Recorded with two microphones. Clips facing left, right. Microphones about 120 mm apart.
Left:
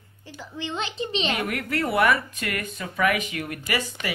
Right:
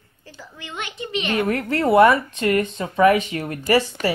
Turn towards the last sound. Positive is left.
turn(degrees=-35)  # may be behind; listen again after turning